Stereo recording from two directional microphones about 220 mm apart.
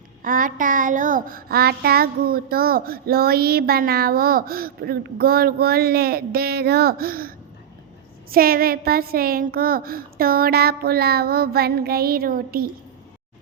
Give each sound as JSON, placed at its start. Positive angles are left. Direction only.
{"t": 0.2, "sound": "child singing", "side_deg": -40}